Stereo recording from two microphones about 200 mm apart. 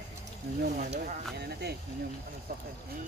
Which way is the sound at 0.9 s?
50° right (ahead or behind).